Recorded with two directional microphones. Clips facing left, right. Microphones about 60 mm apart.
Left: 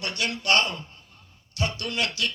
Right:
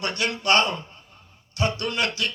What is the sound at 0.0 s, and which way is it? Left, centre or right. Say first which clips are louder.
A man's voice: right 3 dB; right.